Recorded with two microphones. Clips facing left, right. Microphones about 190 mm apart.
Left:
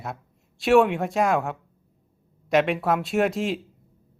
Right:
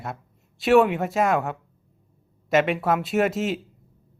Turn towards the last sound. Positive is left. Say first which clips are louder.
# right 1 dB
turn(degrees=0)  # may be behind; listen again after turning